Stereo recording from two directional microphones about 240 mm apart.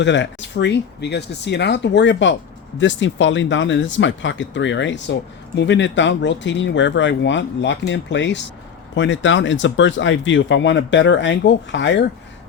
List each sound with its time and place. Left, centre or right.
0.0 s speech: left